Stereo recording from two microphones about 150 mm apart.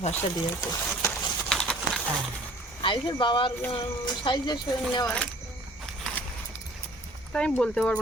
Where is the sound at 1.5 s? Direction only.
5° left (ahead or behind).